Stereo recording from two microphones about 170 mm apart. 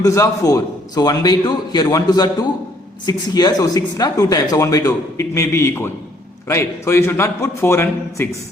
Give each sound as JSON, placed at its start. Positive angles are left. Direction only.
{"t": 0.0, "sound": "a man's voice", "side_deg": 20}